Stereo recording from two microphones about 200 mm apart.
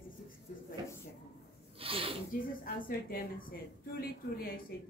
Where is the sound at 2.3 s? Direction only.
45° left (ahead or behind).